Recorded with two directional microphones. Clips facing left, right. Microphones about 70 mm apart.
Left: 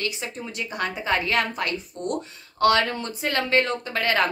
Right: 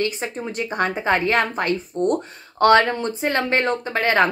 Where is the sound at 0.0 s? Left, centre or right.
Right.